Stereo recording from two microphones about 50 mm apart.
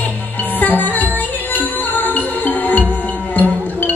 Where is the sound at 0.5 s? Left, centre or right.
Left.